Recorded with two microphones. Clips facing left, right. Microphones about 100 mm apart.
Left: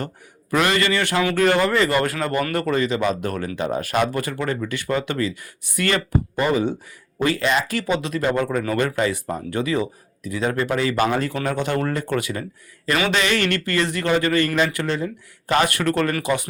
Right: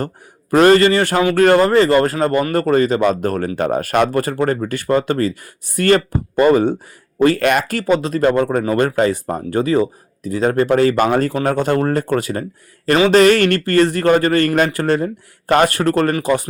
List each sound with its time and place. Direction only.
0.5 s speech: 40° right (ahead or behind)